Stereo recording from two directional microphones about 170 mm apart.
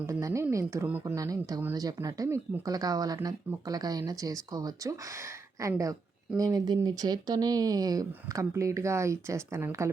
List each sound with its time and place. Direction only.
0.0 s a woman's voice: 15° right (ahead or behind)